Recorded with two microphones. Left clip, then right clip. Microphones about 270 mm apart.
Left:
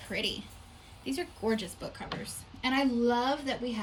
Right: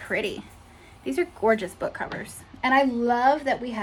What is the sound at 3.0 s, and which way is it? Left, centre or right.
Speech, right.